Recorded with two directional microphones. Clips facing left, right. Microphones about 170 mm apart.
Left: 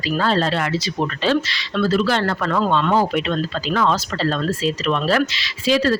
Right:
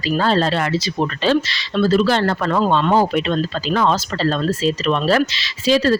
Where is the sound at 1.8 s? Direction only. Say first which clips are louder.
Right 3 dB; 30° right (ahead or behind).